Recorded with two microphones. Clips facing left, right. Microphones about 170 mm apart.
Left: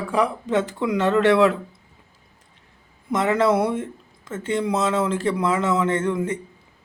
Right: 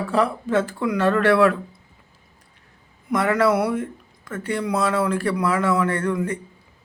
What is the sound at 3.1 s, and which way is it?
Speech, 25° left (ahead or behind).